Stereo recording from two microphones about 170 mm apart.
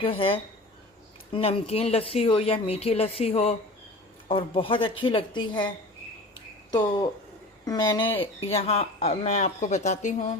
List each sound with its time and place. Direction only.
0.0 s speech: 30° left (ahead or behind)
8.2 s speech: 35° left (ahead or behind)